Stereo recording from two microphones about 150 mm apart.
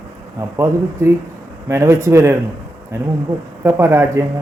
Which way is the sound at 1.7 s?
20° right (ahead or behind).